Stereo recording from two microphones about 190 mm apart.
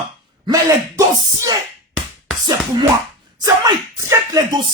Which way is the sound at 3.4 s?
15° right (ahead or behind).